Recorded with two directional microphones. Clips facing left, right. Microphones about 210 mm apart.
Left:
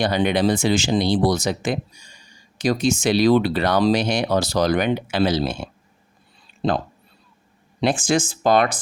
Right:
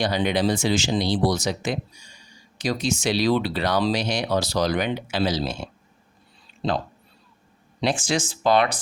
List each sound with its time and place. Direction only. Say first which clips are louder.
0.0 s speech: left 3 dB; 55° left (ahead or behind)